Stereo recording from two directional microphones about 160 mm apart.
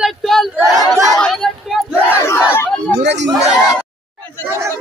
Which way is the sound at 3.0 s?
90° right.